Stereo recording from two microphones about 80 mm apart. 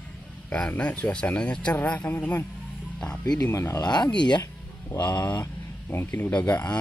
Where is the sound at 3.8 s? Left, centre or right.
Left.